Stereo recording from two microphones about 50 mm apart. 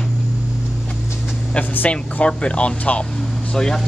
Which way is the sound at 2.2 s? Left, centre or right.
Left.